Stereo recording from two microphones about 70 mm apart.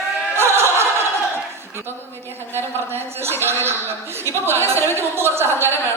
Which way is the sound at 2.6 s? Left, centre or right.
Right.